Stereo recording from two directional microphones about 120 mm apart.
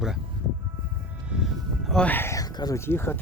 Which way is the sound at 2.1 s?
15° left (ahead or behind).